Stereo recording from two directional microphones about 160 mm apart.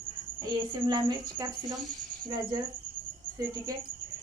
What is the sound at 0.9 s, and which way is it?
Speech, 25° right (ahead or behind).